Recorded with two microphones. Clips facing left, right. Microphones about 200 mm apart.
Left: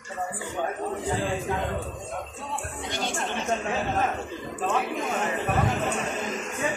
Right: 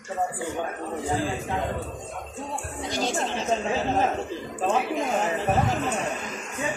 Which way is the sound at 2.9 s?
35° right (ahead or behind).